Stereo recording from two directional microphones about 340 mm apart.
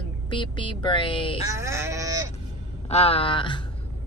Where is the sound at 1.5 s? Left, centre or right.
Centre.